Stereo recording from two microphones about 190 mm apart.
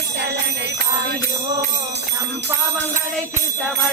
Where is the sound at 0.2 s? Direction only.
65° right (ahead or behind).